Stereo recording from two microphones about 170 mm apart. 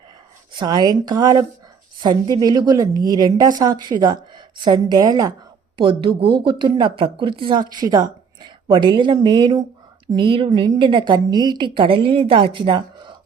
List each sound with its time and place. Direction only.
0.5 s a woman's voice: 25° right (ahead or behind)